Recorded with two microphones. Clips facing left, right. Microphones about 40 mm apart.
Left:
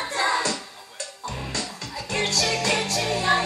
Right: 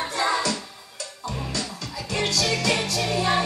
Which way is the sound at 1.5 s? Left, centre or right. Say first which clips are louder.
Even; left.